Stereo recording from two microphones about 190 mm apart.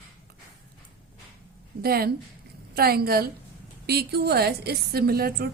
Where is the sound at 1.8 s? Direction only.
55° right (ahead or behind).